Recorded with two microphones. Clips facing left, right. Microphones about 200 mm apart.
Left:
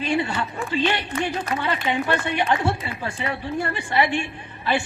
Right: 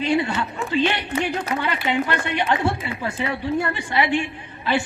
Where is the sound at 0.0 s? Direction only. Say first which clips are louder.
Right 2 dB; 20° right (ahead or behind).